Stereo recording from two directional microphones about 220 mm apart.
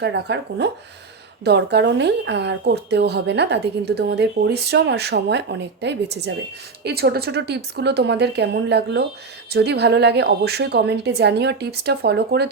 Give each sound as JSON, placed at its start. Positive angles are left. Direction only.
{"t": 0.0, "sound": "speech", "side_deg": -50}